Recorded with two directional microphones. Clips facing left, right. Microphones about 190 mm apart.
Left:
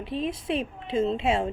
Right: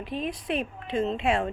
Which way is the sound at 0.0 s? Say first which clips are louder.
Left 2 dB; 25° left (ahead or behind).